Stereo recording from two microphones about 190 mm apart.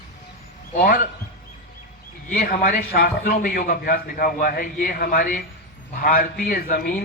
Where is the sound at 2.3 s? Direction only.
50° left (ahead or behind).